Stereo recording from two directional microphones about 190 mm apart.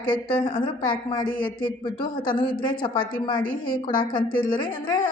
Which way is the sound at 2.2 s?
50° left (ahead or behind).